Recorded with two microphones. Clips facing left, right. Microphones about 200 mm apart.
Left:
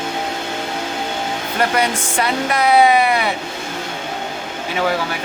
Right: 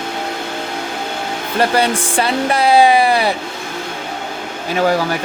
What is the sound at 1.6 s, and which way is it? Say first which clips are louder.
Speech: right 3 dB; 30° right (ahead or behind).